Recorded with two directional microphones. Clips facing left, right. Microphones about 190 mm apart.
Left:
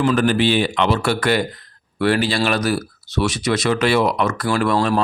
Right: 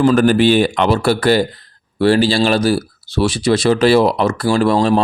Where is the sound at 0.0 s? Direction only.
40° right (ahead or behind).